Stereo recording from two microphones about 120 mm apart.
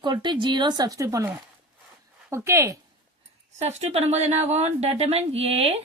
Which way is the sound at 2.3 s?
25° right (ahead or behind).